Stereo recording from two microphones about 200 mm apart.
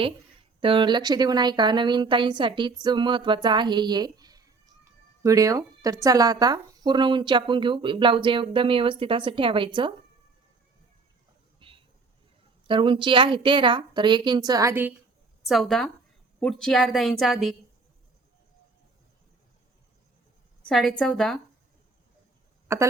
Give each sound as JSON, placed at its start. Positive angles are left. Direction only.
{"t": 0.6, "sound": "speech", "side_deg": -25}
{"t": 12.6, "sound": "speech", "side_deg": -25}
{"t": 15.4, "sound": "a woman's voice", "side_deg": 0}
{"t": 20.7, "sound": "a woman's voice", "side_deg": 0}
{"t": 22.7, "sound": "a woman's voice", "side_deg": -15}